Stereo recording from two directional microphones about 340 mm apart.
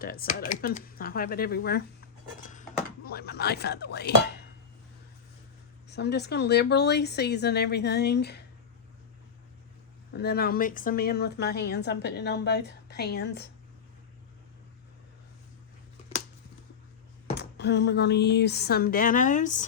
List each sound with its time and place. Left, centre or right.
0.0 s speech: left
2.5 s dishes: left
5.9 s speech: left
10.1 s speech: left
17.3 s speech: left